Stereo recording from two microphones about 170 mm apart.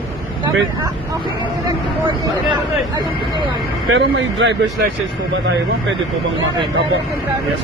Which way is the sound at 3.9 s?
90° right.